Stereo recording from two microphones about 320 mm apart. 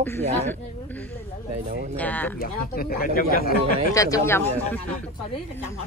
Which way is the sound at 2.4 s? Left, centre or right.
Left.